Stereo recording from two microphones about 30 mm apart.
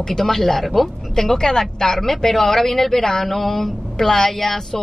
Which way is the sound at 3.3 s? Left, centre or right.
Centre.